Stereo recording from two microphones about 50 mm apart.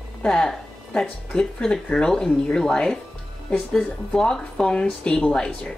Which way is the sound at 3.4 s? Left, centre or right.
Left.